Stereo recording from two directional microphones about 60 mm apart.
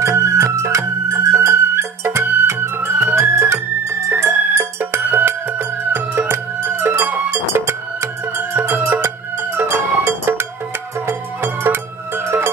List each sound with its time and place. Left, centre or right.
0.0 s music: right
2.7 s music: right
5.0 s music: right